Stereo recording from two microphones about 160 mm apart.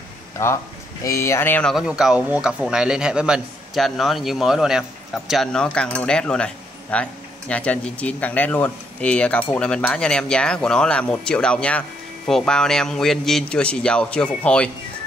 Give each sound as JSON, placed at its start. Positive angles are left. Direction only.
{"t": 1.0, "sound": "speech", "side_deg": 15}
{"t": 1.7, "sound": "a man's voice", "side_deg": -5}